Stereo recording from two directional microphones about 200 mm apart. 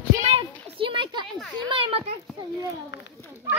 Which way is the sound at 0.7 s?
25° right (ahead or behind).